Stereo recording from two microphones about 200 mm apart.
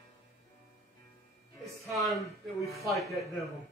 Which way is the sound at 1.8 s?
Centre (ahead or behind).